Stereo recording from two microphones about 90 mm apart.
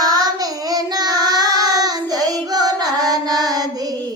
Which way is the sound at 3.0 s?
50° right (ahead or behind).